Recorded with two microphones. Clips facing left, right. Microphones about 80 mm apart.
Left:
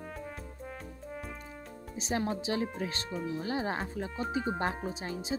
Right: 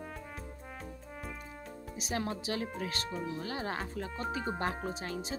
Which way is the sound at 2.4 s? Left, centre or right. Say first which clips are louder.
Left 3 dB; left.